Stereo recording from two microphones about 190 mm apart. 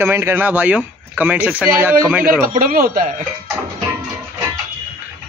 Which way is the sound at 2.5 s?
50° right (ahead or behind).